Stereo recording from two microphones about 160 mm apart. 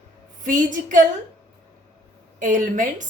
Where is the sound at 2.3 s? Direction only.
55° right (ahead or behind).